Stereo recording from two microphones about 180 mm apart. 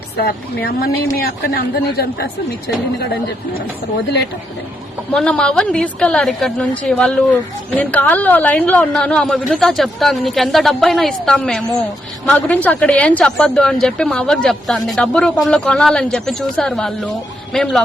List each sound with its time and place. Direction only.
0.2 s speech: 60° left (ahead or behind)
5.1 s speech: 5° left (ahead or behind)